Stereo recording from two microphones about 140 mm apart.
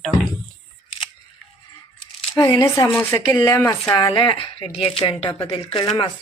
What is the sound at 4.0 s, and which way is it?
Speech, 30° left (ahead or behind).